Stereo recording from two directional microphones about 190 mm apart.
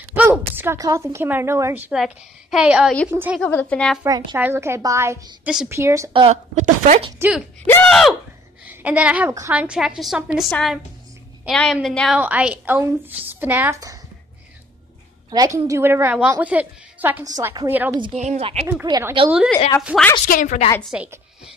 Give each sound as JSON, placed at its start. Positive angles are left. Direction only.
{"t": 0.1, "sound": "a woman's voice", "side_deg": -10}
{"t": 3.3, "sound": "a woman's voice", "side_deg": 10}
{"t": 4.0, "sound": "a woman's voice", "side_deg": -20}
{"t": 6.1, "sound": "a woman's voice", "side_deg": -35}
{"t": 7.1, "sound": "a woman's voice", "side_deg": -10}
{"t": 7.6, "sound": "a woman's voice", "side_deg": 5}
{"t": 15.2, "sound": "a woman's voice", "side_deg": -20}
{"t": 18.1, "sound": "a woman's voice", "side_deg": -40}
{"t": 18.9, "sound": "a woman's voice", "side_deg": -20}
{"t": 20.2, "sound": "a woman's voice", "side_deg": 45}
{"t": 20.8, "sound": "a woman's voice", "side_deg": -5}